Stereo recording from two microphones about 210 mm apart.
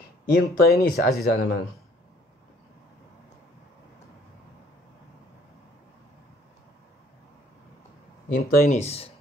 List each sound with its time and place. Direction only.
0.3 s speech: 45° left (ahead or behind)
8.4 s speech: 45° left (ahead or behind)